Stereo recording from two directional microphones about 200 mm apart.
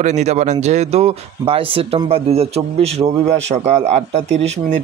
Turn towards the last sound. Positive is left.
turn(degrees=-35)  # may be behind; listen again after turning